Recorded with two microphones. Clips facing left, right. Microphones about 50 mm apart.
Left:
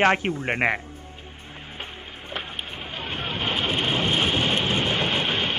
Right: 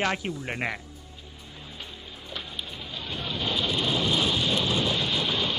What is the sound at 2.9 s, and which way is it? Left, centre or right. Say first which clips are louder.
Vehicle: left 3 dB; left.